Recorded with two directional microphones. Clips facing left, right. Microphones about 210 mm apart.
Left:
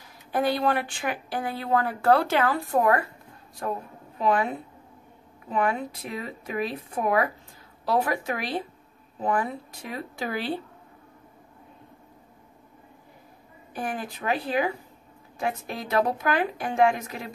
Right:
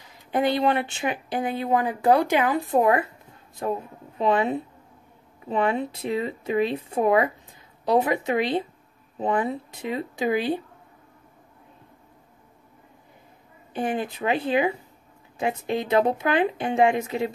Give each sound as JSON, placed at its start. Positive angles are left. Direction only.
{"t": 0.0, "sound": "speech", "side_deg": -20}
{"t": 13.7, "sound": "speech", "side_deg": -25}